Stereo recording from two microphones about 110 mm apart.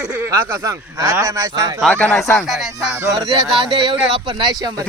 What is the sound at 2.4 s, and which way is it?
Music, 5° right (ahead or behind).